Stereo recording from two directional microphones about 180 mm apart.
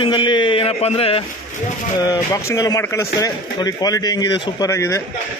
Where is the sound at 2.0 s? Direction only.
20° left (ahead or behind).